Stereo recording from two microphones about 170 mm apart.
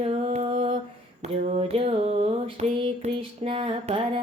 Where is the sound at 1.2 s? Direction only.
35° right (ahead or behind).